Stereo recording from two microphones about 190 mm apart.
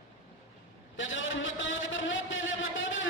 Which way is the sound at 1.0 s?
85° left.